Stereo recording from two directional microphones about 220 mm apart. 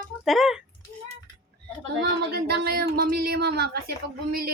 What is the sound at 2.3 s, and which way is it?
Speech, 45° right (ahead or behind).